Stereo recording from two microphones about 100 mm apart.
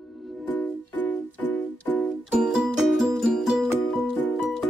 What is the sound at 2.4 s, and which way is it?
Music, 5° right (ahead or behind).